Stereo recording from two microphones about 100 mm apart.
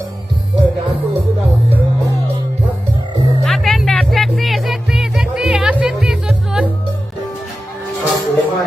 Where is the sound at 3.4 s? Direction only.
Centre (ahead or behind).